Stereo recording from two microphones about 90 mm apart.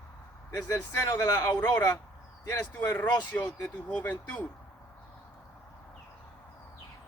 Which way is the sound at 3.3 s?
20° left (ahead or behind).